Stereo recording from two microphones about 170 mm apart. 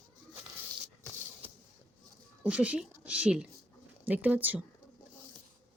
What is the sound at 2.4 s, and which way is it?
Speech, 5° right (ahead or behind).